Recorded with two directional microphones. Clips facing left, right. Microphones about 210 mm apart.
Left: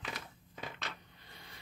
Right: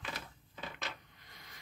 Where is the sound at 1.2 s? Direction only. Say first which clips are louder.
Left 3 dB; 30° left (ahead or behind).